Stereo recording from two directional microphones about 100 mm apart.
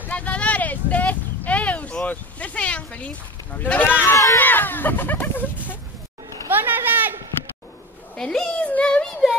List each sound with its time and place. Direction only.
0.1 s vehicle: 15° left (ahead or behind)
2.0 s sheep: 15° left (ahead or behind)
4.0 s speech: 30° left (ahead or behind)
4.4 s speech: 20° left (ahead or behind)
6.5 s a sound: 20° right (ahead or behind)
8.2 s a sound: 10° left (ahead or behind)